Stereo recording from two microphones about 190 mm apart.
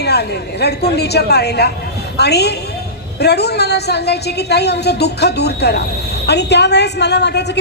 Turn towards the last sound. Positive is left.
turn(degrees=60)  # may be behind; listen again after turning